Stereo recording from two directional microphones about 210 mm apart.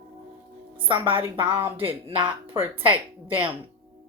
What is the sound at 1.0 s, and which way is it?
Speech, 10° right (ahead or behind).